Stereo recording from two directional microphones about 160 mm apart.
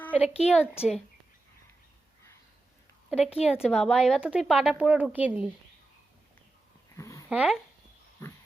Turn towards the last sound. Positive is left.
turn(degrees=-5)  # may be behind; listen again after turning